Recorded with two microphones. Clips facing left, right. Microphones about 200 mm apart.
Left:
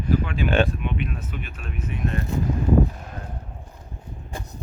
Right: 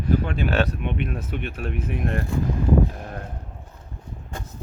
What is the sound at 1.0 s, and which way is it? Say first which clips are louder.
Speech: right 4 dB; 50° right (ahead or behind).